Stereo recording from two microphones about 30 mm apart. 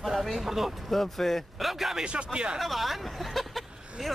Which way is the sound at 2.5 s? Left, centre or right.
Centre.